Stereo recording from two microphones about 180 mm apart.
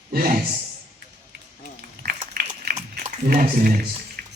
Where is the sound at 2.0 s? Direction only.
60° right (ahead or behind).